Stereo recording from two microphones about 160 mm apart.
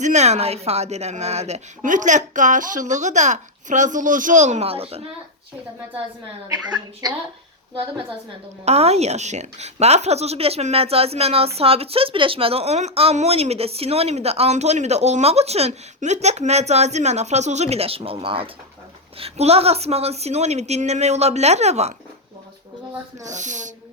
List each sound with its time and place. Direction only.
0.0 s a woman's voice: 45° right (ahead or behind)
8.6 s a woman's voice: 40° right (ahead or behind)
23.2 s a woman's voice: 50° right (ahead or behind)